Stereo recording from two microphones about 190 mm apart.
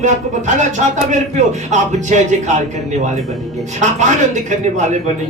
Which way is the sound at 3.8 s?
40° right (ahead or behind).